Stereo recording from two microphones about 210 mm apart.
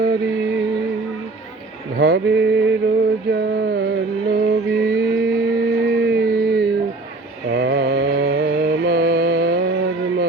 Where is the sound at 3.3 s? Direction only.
50° right (ahead or behind).